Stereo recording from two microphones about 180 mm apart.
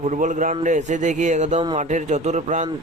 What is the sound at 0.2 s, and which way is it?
Speech, 45° right (ahead or behind).